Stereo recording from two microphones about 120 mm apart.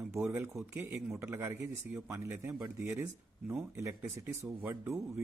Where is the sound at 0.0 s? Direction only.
15° right (ahead or behind).